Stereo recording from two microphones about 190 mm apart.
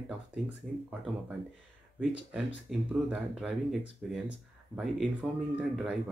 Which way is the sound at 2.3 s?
5° right (ahead or behind).